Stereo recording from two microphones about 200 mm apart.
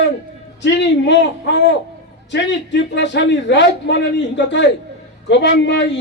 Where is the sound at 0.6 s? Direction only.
65° left (ahead or behind).